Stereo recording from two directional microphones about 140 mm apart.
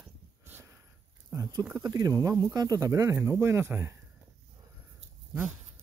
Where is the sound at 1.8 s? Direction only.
25° right (ahead or behind).